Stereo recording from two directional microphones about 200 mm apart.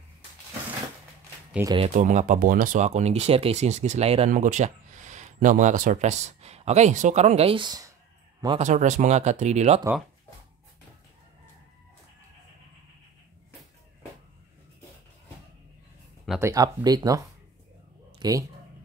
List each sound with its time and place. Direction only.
1.6 s speech: 15° right (ahead or behind)
2.0 s a man's voice: 40° right (ahead or behind); by 8.6 s 25° right (ahead or behind)
8.6 s speech: 40° right (ahead or behind)
16.3 s speech: 15° right (ahead or behind)
18.2 s speech: 20° right (ahead or behind)